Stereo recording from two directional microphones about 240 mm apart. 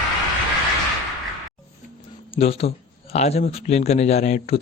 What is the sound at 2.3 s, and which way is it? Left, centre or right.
Speech, left.